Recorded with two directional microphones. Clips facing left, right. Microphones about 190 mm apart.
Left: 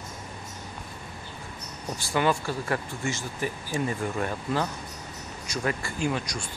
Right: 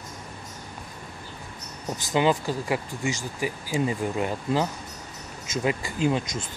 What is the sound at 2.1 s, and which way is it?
Speech, 15° right (ahead or behind).